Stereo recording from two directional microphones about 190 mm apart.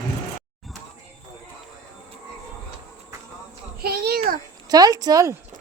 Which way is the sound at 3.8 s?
55° right (ahead or behind).